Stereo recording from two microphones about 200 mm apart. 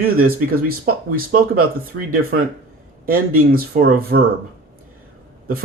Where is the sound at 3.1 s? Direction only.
45° right (ahead or behind).